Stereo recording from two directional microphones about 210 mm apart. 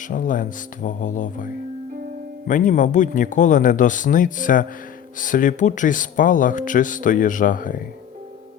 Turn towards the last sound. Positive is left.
turn(degrees=40)  # may be behind; listen again after turning